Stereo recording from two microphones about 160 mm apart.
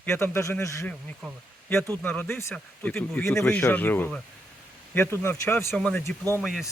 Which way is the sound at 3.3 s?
5° left (ahead or behind).